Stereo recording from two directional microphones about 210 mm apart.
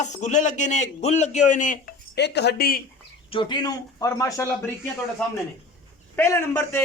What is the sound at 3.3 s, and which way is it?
A man's voice, 20° left (ahead or behind).